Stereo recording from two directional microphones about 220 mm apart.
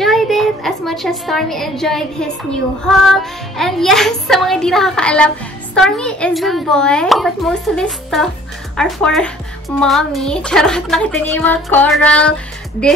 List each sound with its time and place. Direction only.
0.0 s a woman's voice: centre (ahead or behind)